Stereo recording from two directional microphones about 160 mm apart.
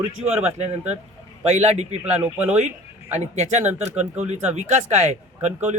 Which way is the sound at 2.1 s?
10° right (ahead or behind).